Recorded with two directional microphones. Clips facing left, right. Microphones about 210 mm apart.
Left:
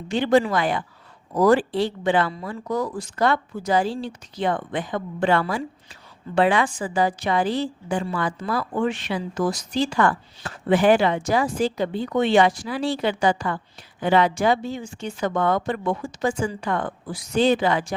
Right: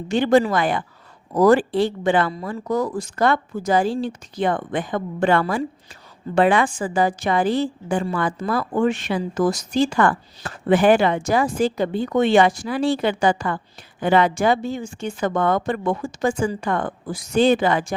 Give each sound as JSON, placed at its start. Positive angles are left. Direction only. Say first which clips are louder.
{"t": 0.1, "sound": "a woman's voice", "louder": "right 2 dB", "side_deg": -45}